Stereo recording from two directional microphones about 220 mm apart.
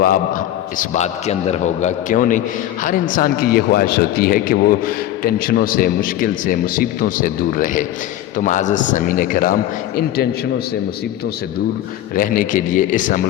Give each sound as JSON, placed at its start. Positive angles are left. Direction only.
{"t": 0.0, "sound": "speech", "side_deg": 40}
{"t": 12.1, "sound": "speech", "side_deg": 40}